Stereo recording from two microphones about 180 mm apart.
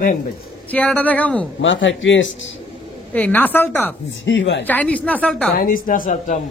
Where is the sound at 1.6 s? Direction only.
90° left.